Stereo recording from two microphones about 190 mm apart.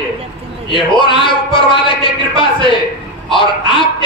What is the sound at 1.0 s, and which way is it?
Speech, 25° left (ahead or behind).